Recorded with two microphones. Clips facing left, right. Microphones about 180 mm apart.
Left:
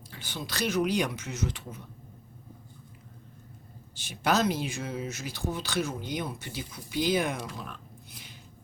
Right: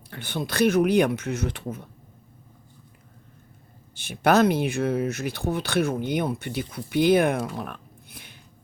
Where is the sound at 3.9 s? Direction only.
60° right (ahead or behind).